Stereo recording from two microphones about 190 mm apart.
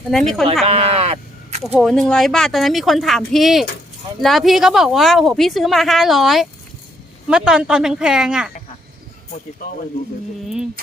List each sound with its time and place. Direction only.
0.1 s a woman's voice: centre (ahead or behind)
0.6 s sheep: 30° right (ahead or behind)
1.8 s a woman's voice: centre (ahead or behind)